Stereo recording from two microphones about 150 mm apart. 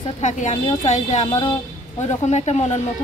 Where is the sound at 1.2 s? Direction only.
35° left (ahead or behind).